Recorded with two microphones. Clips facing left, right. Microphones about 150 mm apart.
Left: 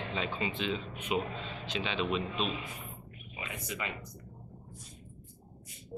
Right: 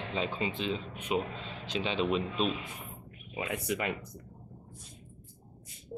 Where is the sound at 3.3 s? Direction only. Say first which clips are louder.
Right 7 dB; 65° right (ahead or behind).